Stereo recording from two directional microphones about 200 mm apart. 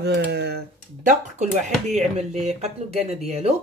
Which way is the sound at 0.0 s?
55° right (ahead or behind).